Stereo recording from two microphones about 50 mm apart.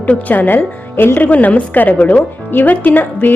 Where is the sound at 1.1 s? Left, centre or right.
Left.